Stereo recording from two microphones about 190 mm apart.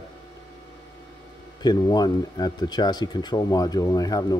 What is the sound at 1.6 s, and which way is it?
Speech, 20° left (ahead or behind).